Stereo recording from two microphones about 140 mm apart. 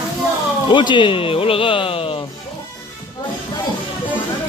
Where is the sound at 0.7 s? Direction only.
35° left (ahead or behind).